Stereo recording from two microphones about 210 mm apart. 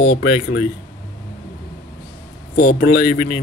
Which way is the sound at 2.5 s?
45° left (ahead or behind).